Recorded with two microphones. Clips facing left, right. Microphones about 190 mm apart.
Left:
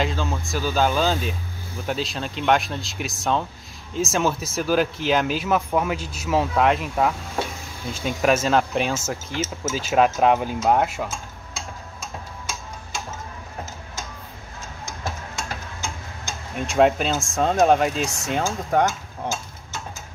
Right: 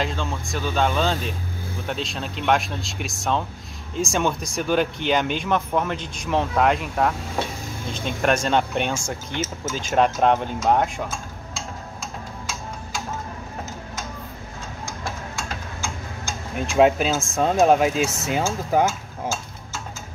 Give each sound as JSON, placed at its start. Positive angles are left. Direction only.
{"t": 0.0, "sound": "speech", "side_deg": 0}
{"t": 14.9, "sound": "a sound", "side_deg": 20}
{"t": 16.5, "sound": "speech", "side_deg": 0}